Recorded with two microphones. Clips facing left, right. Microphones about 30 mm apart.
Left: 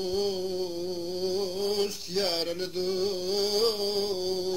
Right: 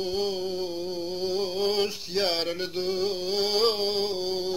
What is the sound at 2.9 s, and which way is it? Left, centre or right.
Music, centre.